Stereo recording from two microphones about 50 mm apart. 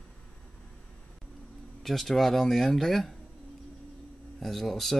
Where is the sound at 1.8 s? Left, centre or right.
Centre.